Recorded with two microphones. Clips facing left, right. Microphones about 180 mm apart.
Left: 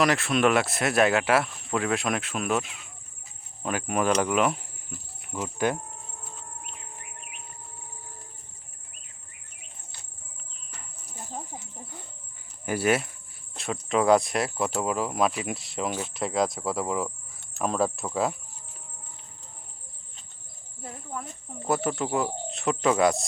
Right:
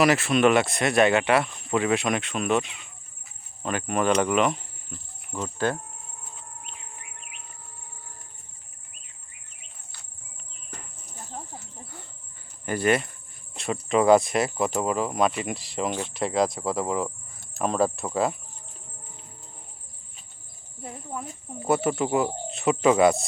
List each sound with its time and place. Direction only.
0.0 s speech: centre (ahead or behind)
3.6 s cricket: 5° left (ahead or behind)
11.5 s cricket: 15° left (ahead or behind)
12.6 s speech: 10° left (ahead or behind)
20.8 s snake: 20° right (ahead or behind)
21.6 s speech: 5° right (ahead or behind)